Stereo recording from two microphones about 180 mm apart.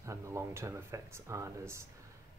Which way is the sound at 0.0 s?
15° right (ahead or behind).